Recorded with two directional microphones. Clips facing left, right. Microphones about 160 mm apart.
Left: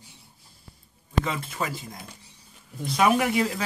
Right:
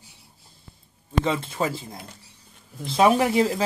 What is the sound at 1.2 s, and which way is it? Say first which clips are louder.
Speech: right 5 dB; 30° right (ahead or behind).